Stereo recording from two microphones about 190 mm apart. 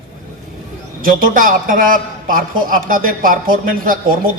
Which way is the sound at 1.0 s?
45° right (ahead or behind).